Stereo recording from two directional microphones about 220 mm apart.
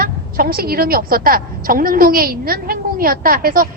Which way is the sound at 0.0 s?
40° right (ahead or behind).